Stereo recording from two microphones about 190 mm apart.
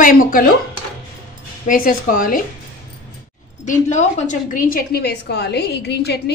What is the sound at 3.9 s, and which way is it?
A woman's voice, 40° left (ahead or behind).